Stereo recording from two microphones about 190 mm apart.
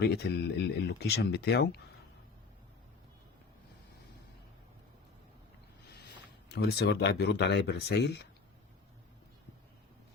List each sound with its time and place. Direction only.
0.0 s speech: 60° left (ahead or behind)
6.5 s speech: 60° left (ahead or behind)